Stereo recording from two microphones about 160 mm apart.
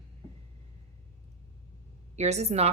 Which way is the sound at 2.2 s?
45° right (ahead or behind).